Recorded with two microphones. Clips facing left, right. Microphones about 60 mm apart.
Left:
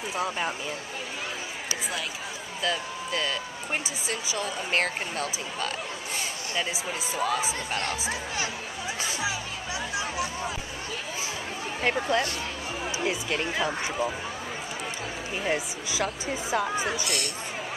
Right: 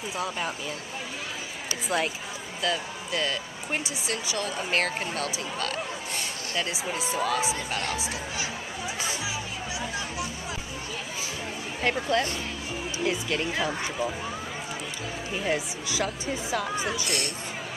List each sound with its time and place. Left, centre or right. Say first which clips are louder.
2.6 s speech: even; centre
6.5 s speech: right 1 dB; centre
11.8 s speech: even; centre
13.0 s speech: right 2 dB; centre
15.4 s speech: even; centre